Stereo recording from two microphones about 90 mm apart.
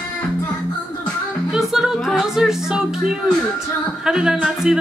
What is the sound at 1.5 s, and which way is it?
Music, 5° right (ahead or behind).